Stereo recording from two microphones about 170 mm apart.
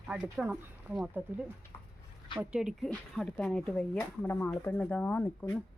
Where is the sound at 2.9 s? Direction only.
5° left (ahead or behind).